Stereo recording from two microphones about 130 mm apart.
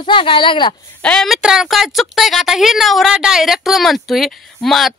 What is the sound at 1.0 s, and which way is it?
Speech, centre (ahead or behind).